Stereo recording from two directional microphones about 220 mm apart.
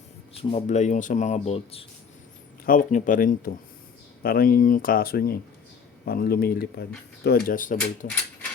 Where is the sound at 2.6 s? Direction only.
40° left (ahead or behind).